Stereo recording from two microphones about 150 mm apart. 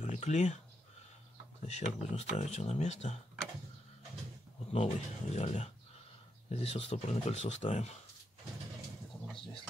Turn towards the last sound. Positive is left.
turn(degrees=50)  # may be behind; listen again after turning